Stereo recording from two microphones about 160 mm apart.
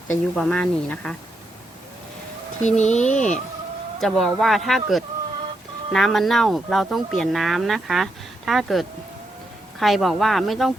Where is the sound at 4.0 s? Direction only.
Centre (ahead or behind).